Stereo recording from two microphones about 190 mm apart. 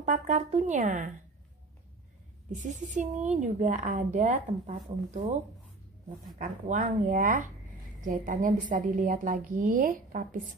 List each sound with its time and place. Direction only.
0.0 s speech: 40° right (ahead or behind)
2.5 s a woman's voice: 40° right (ahead or behind)